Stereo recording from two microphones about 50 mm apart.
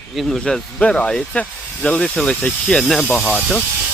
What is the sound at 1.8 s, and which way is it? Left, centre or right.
Speech, centre.